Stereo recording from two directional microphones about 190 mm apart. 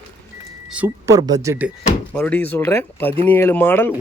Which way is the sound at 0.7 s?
10° right (ahead or behind).